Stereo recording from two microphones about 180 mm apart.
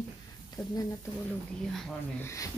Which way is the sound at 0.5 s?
20° left (ahead or behind).